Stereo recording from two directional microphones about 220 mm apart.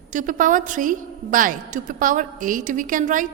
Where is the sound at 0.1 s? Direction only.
35° right (ahead or behind).